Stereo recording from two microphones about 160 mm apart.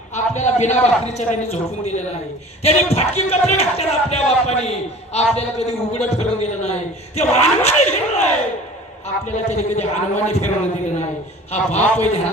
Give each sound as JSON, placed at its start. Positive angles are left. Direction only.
{"t": 0.1, "sound": "a man's voice", "side_deg": 50}
{"t": 11.5, "sound": "a man's voice", "side_deg": 45}